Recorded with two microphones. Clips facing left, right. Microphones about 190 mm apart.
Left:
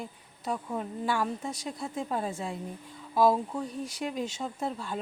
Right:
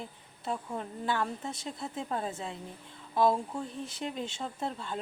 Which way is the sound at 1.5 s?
25° right (ahead or behind).